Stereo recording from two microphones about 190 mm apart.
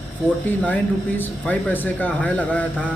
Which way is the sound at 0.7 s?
10° left (ahead or behind).